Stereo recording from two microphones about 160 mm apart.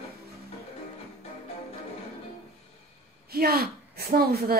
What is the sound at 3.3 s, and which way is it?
A woman's voice, 75° right (ahead or behind).